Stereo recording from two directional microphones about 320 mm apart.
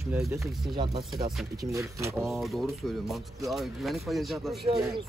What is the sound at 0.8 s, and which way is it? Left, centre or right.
Speech, centre.